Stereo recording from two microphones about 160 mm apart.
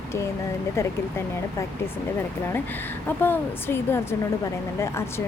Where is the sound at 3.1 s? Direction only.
10° left (ahead or behind).